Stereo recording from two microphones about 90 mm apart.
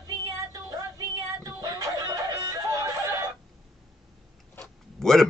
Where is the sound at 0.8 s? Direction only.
45° right (ahead or behind).